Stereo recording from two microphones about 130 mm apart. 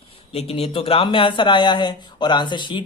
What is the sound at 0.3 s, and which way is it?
Speech, 50° left (ahead or behind).